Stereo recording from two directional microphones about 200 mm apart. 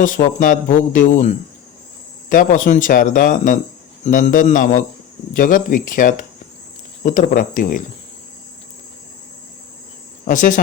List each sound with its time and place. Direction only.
0.0 s speech: 40° left (ahead or behind)
10.2 s speech: 40° left (ahead or behind)